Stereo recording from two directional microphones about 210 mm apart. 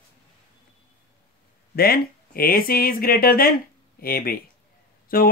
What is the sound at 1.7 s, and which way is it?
Speech, 45° left (ahead or behind).